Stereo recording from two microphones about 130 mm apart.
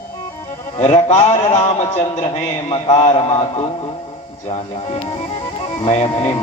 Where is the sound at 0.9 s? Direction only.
35° left (ahead or behind).